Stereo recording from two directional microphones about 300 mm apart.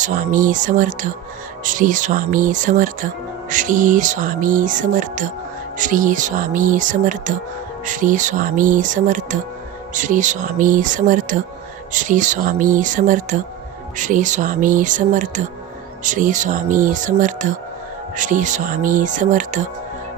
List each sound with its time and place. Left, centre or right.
0.0 s speech: right